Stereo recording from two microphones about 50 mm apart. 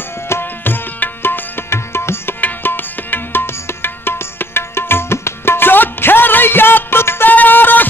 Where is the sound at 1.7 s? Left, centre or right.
Left.